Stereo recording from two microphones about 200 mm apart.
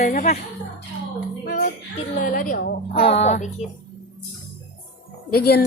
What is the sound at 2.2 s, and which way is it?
Speech, 45° left (ahead or behind).